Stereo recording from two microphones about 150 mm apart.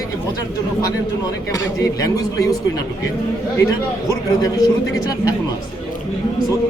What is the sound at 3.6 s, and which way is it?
A man's voice, 20° left (ahead or behind).